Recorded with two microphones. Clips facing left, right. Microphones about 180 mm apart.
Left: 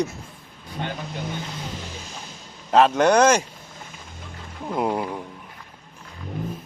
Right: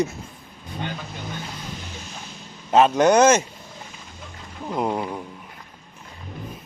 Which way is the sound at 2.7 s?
Centre (ahead or behind).